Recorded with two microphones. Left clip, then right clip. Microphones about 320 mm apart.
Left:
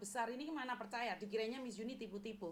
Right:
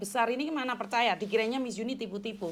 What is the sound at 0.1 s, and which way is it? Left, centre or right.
A woman's voice, right.